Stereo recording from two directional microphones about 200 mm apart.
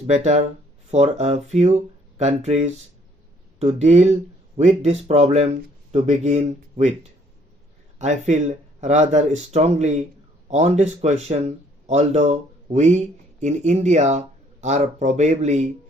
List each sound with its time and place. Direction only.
0.1 s speech: 35° right (ahead or behind)
7.9 s speech: 35° right (ahead or behind)